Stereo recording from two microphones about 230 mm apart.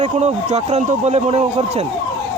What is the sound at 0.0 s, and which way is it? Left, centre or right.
Speech, right.